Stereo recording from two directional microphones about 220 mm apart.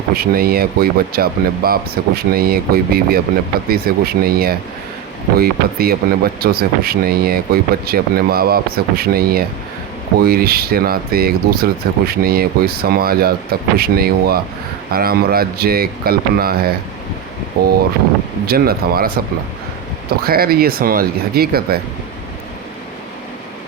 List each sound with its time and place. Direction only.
0.1 s speech: 45° right (ahead or behind)
18.4 s speech: 45° right (ahead or behind)
20.2 s speech: 45° right (ahead or behind)